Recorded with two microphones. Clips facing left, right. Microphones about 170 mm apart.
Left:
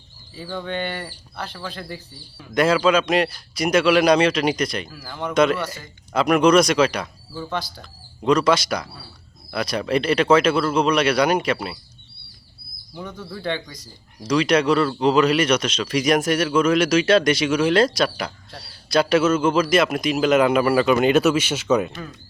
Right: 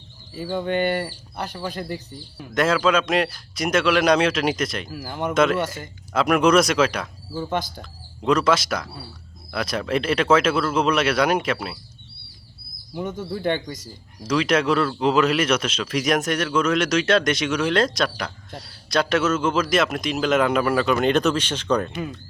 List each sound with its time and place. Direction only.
0.6 s speech: 45° right (ahead or behind)
2.6 s speech: centre (ahead or behind)
5.0 s speech: 20° right (ahead or behind)
5.3 s speech: centre (ahead or behind)
13.0 s speech: 20° right (ahead or behind)
13.5 s speech: 45° right (ahead or behind)
14.3 s speech: centre (ahead or behind)